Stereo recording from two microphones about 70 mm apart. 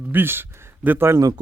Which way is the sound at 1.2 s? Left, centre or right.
Right.